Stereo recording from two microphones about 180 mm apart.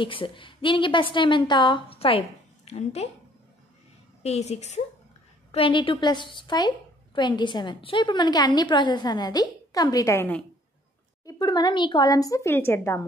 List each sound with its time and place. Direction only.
0.0 s a woman's voice: 30° left (ahead or behind)
4.2 s a woman's voice: 35° left (ahead or behind); by 10.4 s 10° left (ahead or behind)
11.2 s a woman's voice: 25° left (ahead or behind)